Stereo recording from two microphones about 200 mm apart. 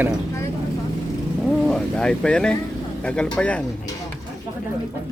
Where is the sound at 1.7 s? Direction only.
5° left (ahead or behind).